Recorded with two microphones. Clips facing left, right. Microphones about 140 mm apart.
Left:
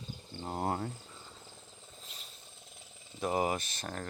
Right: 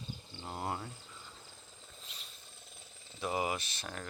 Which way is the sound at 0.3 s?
45° left (ahead or behind).